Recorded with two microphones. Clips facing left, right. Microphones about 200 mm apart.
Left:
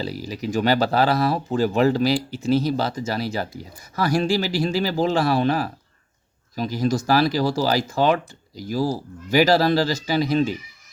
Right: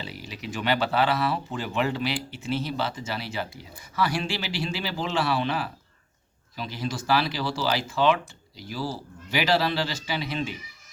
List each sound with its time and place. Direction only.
0.0 s speech: 40° left (ahead or behind)